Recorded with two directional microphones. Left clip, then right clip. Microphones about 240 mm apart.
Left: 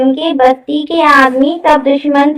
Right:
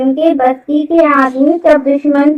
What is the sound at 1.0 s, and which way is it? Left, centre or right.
Child singing, left.